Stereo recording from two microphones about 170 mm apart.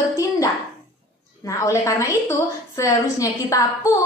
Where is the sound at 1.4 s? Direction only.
20° left (ahead or behind).